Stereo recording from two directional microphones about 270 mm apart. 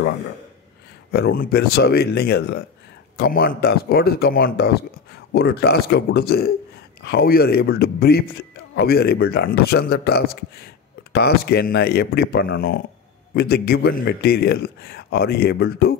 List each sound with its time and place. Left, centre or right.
1.1 s a man's voice: left